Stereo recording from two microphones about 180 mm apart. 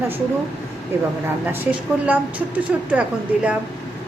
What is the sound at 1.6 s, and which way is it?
A woman's voice, 10° right (ahead or behind).